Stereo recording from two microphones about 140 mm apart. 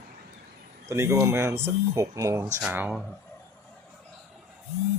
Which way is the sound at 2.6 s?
10° right (ahead or behind).